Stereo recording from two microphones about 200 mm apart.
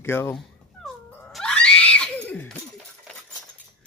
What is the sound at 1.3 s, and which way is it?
Screaming, 5° left (ahead or behind).